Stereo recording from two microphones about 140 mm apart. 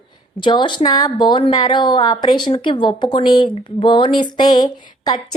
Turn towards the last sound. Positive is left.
turn(degrees=30)  # may be behind; listen again after turning